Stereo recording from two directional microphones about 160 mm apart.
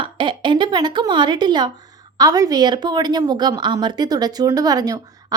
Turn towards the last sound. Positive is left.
turn(degrees=-25)  # may be behind; listen again after turning